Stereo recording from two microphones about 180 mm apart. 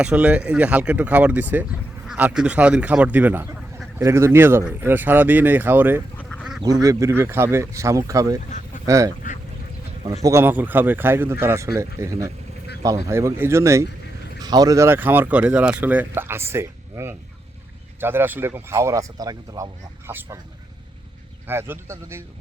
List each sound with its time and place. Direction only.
0.0 s speech: 5° right (ahead or behind)
10.2 s speech: 15° right (ahead or behind)
21.4 s speech: 10° right (ahead or behind)